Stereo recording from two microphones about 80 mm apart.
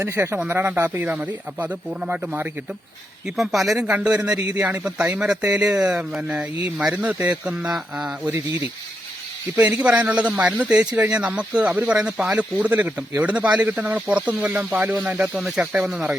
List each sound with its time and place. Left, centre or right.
0.0 s speech: right
1.0 s speech: centre
3.2 s a man's voice: centre
9.6 s a man's voice: centre
15.4 s a man's voice: centre